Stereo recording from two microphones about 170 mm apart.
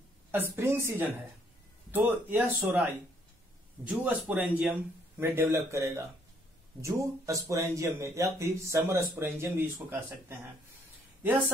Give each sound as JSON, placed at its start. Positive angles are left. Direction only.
{"t": 0.3, "sound": "speech", "side_deg": -15}